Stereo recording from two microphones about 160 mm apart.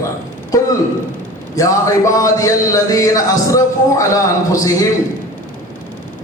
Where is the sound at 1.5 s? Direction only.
20° left (ahead or behind).